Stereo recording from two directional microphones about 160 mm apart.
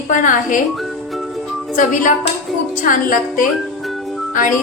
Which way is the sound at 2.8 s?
55° left (ahead or behind).